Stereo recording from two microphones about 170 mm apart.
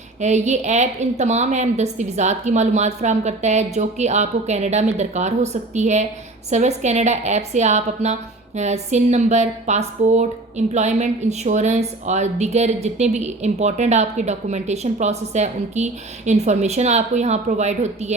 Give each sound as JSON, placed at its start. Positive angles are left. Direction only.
{"t": 0.2, "sound": "a woman's voice", "side_deg": -45}